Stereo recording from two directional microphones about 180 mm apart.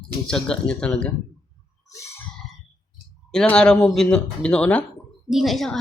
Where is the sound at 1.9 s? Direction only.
15° left (ahead or behind).